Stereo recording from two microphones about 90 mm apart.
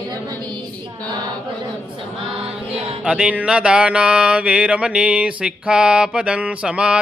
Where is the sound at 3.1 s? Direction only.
15° right (ahead or behind).